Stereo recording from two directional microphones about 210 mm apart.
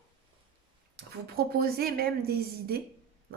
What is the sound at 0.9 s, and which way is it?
A woman's voice, 50° right (ahead or behind).